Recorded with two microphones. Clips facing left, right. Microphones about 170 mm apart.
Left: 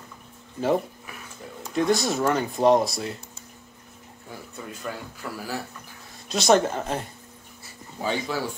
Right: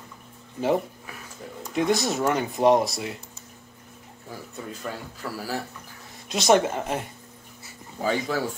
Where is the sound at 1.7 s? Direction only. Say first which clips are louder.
Left 1 dB; 20° right (ahead or behind).